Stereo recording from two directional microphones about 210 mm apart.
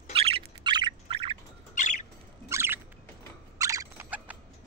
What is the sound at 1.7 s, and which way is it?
Bird, 35° left (ahead or behind).